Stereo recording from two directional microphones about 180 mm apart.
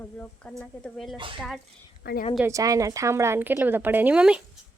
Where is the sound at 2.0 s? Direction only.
65° left (ahead or behind).